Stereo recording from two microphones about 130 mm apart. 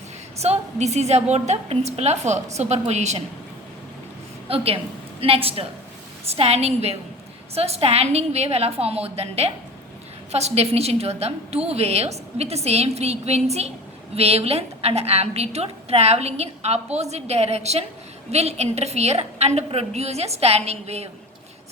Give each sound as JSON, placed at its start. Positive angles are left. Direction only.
{"t": 0.4, "sound": "a woman's voice", "side_deg": -55}
{"t": 4.4, "sound": "a woman's voice", "side_deg": -50}